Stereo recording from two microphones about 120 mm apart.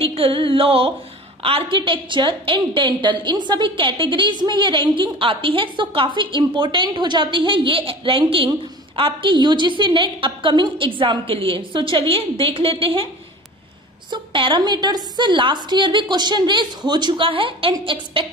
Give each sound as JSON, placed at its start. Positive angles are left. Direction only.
{"t": 0.0, "sound": "a woman's voice", "side_deg": -50}
{"t": 14.1, "sound": "a woman's voice", "side_deg": -45}